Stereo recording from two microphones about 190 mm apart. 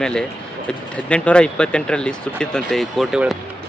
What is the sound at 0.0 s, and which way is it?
Speech, 5° left (ahead or behind).